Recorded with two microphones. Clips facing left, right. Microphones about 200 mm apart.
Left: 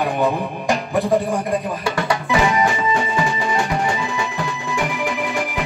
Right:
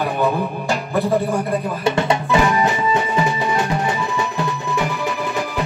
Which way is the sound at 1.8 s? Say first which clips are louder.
Right 3 dB; 25° right (ahead or behind).